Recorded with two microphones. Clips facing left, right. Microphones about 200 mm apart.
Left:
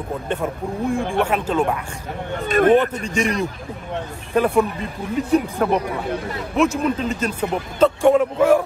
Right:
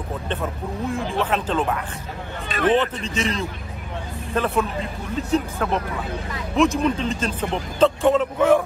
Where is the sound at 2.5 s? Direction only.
50° left (ahead or behind).